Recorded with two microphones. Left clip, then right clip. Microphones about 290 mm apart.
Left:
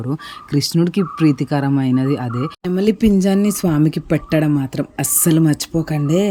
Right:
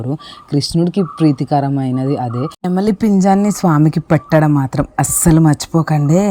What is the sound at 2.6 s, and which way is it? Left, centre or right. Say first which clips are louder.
Speech: even; centre.